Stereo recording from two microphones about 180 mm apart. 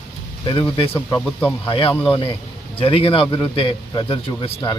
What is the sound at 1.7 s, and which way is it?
A man's voice, 30° left (ahead or behind).